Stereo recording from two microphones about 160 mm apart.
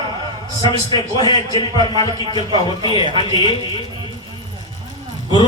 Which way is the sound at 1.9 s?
35° right (ahead or behind).